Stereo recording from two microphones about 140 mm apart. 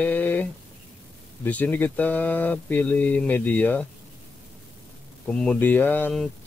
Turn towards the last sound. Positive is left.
turn(degrees=15)  # may be behind; listen again after turning